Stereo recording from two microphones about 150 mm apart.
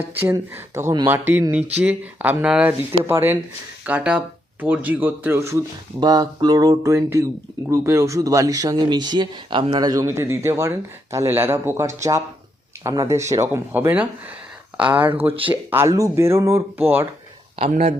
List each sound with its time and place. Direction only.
0.0 s speech: 15° right (ahead or behind)
17.7 s speech: 45° right (ahead or behind)